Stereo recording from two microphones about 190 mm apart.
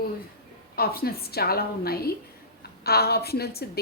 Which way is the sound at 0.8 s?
55° left (ahead or behind).